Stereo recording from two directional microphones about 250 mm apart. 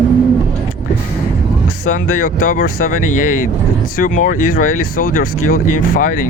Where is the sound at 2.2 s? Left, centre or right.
Left.